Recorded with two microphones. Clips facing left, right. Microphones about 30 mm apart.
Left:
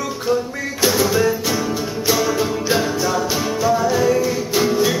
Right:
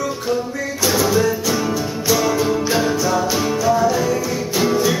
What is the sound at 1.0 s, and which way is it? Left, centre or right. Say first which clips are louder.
Music: right 1 dB; centre.